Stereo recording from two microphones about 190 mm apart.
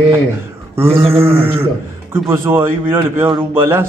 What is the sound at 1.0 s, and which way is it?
Sheep, 30° right (ahead or behind).